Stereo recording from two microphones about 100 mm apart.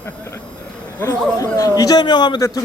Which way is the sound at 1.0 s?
35° left (ahead or behind).